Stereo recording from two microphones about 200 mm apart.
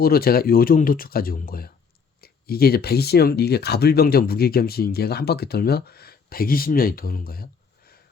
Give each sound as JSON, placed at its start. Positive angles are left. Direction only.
{"t": 0.0, "sound": "speech", "side_deg": 50}